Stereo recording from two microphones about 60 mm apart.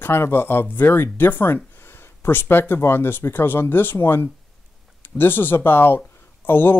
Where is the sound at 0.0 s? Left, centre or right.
Left.